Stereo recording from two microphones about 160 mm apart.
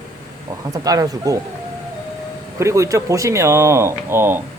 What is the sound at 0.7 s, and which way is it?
Speech, 20° right (ahead or behind).